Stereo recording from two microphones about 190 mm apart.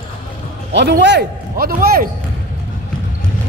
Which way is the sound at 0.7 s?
65° right (ahead or behind).